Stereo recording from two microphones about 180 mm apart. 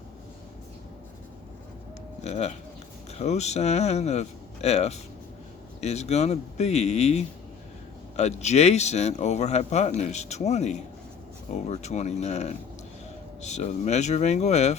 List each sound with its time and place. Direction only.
2.2 s speech: 40° left (ahead or behind)